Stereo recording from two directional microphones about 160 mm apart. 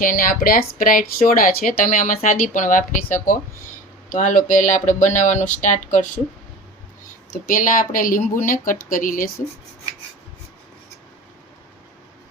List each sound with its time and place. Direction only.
0.0 s speech: 60° left (ahead or behind)
4.1 s speech: 55° left (ahead or behind)